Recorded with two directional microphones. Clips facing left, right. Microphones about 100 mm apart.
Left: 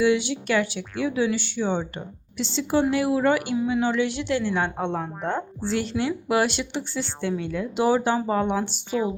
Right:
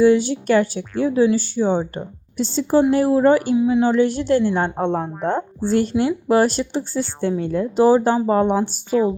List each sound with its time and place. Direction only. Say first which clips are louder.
0.0 s speech: right 7 dB; 40° right (ahead or behind)
4.9 s speech: right 6 dB; 20° right (ahead or behind)
5.6 s speech: right 7 dB; 45° right (ahead or behind)